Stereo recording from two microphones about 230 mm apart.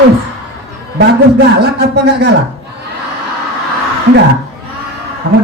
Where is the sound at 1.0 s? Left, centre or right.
Right.